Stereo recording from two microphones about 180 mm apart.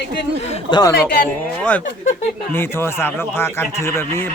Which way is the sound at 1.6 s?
5° left (ahead or behind).